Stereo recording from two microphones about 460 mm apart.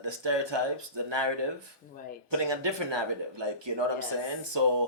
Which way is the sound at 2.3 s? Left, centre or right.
Right.